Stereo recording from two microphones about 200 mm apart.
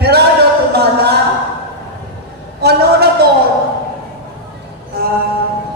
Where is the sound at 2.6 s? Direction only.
55° right (ahead or behind).